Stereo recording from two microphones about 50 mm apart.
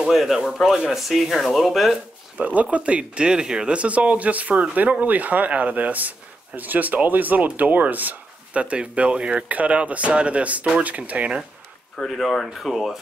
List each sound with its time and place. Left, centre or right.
0.0 s speech: centre
2.3 s speech: right
8.6 s speech: right
12.0 s speech: centre